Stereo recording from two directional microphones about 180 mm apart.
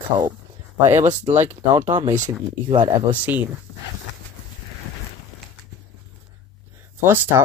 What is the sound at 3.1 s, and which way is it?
Speech, 10° right (ahead or behind).